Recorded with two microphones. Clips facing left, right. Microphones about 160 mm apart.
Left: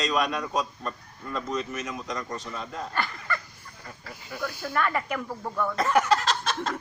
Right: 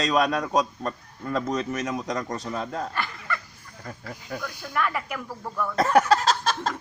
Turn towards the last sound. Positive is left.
turn(degrees=-40)  # may be behind; listen again after turning